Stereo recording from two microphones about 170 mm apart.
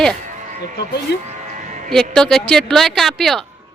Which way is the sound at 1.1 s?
85° left.